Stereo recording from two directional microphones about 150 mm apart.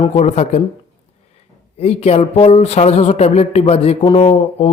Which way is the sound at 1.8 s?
45° left (ahead or behind).